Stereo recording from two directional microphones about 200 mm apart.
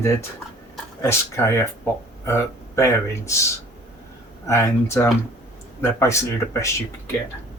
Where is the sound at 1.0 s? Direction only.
10° left (ahead or behind).